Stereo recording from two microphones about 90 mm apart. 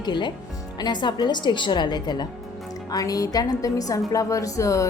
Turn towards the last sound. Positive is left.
turn(degrees=35)  # may be behind; listen again after turning